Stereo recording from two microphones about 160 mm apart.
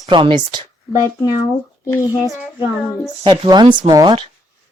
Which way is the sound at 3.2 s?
25° right (ahead or behind).